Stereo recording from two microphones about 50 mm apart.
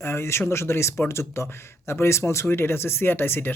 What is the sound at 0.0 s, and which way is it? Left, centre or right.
Speech, left.